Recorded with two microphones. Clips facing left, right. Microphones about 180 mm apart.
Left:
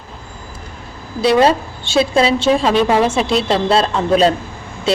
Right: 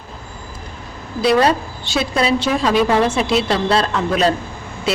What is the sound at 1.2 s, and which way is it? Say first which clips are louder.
A woman's voice: left 2 dB; 25° left (ahead or behind).